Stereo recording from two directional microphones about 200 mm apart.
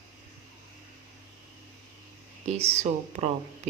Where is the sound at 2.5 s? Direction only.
30° right (ahead or behind).